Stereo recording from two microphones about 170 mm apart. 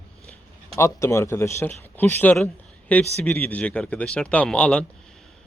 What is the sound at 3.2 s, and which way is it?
Speech, 10° left (ahead or behind).